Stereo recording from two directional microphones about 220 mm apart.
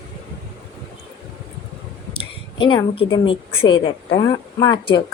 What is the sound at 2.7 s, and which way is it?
A woman's voice, 20° left (ahead or behind).